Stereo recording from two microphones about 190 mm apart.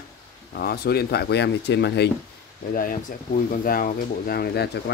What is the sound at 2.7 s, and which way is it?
Speech, 50° left (ahead or behind).